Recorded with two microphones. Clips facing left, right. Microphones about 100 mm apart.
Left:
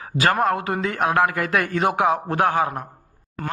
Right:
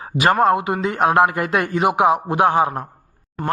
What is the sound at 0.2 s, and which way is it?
A man's voice, 25° right (ahead or behind).